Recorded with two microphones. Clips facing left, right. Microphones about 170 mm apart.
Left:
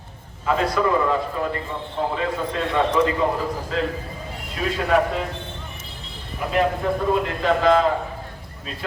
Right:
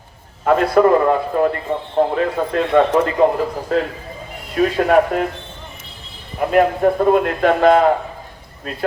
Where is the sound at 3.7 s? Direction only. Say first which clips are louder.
Right 5 dB; 50° right (ahead or behind).